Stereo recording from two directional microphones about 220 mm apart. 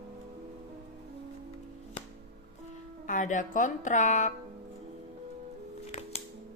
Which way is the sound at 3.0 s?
35° left (ahead or behind).